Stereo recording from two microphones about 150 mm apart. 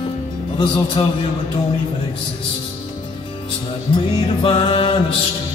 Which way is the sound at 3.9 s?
35° left (ahead or behind).